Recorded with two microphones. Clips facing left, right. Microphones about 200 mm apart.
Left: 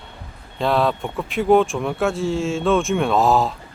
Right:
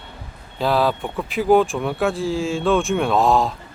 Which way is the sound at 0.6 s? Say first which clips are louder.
Even; centre (ahead or behind).